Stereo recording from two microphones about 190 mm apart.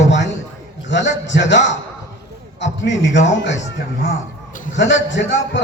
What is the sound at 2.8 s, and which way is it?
Speech, 70° left (ahead or behind).